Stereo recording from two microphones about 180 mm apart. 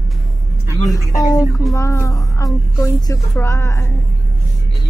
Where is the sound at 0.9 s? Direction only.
20° left (ahead or behind).